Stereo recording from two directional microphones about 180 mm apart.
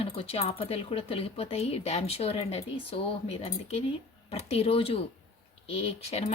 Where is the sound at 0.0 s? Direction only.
30° left (ahead or behind).